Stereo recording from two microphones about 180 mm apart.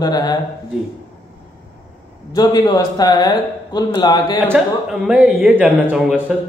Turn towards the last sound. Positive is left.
turn(degrees=-5)  # may be behind; listen again after turning